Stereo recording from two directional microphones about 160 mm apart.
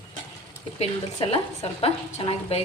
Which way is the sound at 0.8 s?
35° left (ahead or behind).